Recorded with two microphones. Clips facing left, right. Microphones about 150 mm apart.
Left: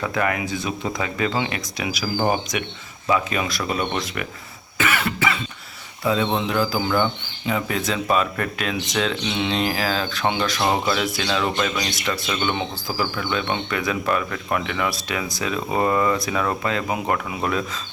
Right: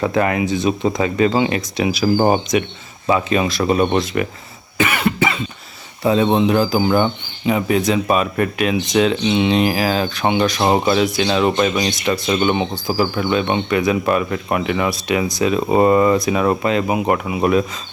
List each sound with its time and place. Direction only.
0.0 s speech: 25° right (ahead or behind)
4.8 s cough: 20° right (ahead or behind)
6.0 s speech: 30° right (ahead or behind)
6.3 s speech: 20° right (ahead or behind)
12.2 s speech: 35° right (ahead or behind)
12.5 s speech: 20° right (ahead or behind)